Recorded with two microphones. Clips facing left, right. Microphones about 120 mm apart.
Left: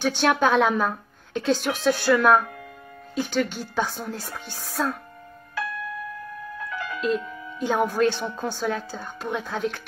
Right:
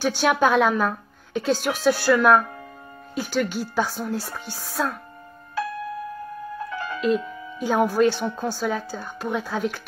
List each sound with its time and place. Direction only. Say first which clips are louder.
0.0 s speech: right 1 dB; 5° right (ahead or behind)
6.7 s music: even; 35° right (ahead or behind)
7.0 s speech: right 3 dB; 5° right (ahead or behind)